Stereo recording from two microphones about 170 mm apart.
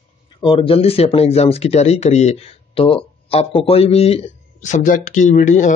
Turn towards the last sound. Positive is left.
turn(degrees=45)  # may be behind; listen again after turning